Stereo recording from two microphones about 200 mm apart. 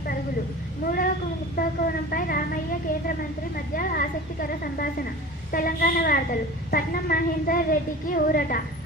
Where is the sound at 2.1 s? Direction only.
45° left (ahead or behind).